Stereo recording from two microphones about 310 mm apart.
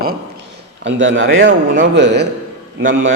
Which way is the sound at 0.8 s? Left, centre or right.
Right.